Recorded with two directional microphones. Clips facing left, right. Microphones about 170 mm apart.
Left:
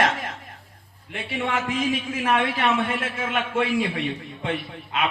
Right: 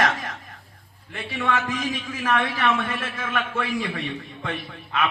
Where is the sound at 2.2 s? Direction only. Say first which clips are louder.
Even; 30° left (ahead or behind).